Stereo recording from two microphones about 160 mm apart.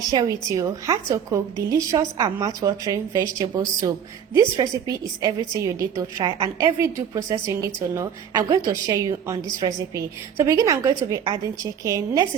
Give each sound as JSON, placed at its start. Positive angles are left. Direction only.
{"t": 0.1, "sound": "a woman's voice", "side_deg": -25}